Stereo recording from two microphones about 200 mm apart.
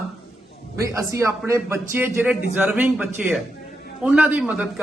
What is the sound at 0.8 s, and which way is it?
A man's voice, 15° right (ahead or behind).